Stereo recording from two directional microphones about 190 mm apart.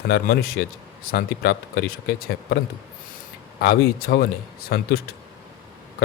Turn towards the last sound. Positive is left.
turn(degrees=60)  # may be behind; listen again after turning